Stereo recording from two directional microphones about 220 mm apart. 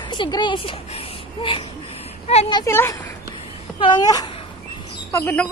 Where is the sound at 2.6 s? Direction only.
10° left (ahead or behind).